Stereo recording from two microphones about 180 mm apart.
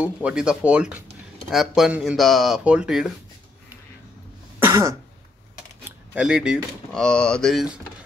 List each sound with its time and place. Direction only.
0.2 s speech: 5° right (ahead or behind)
4.6 s throat clearing: 15° right (ahead or behind)
5.9 s speech: 5° right (ahead or behind)